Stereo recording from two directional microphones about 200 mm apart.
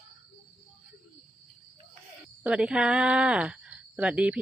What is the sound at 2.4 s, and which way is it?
Speech, 5° right (ahead or behind).